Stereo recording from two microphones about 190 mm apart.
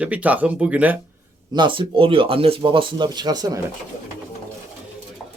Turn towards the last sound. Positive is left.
turn(degrees=-20)  # may be behind; listen again after turning